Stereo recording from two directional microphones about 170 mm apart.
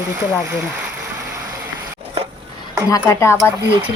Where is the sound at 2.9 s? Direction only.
20° left (ahead or behind).